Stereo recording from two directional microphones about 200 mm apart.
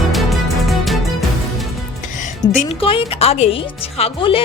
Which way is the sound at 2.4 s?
60° left (ahead or behind).